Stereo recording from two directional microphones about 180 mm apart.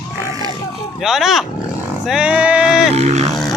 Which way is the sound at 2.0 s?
5° right (ahead or behind).